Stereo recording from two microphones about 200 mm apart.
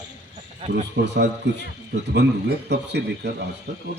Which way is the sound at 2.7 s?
55° right (ahead or behind).